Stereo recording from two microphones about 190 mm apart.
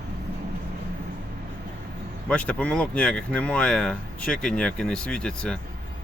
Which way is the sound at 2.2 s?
5° left (ahead or behind).